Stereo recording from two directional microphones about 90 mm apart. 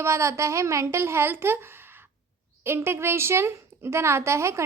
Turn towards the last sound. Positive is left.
turn(degrees=-30)  # may be behind; listen again after turning